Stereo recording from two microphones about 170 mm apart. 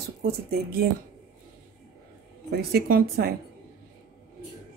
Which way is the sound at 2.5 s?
70° right (ahead or behind).